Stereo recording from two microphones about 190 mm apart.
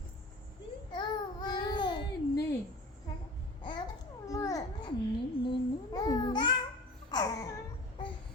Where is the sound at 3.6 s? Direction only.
25° left (ahead or behind).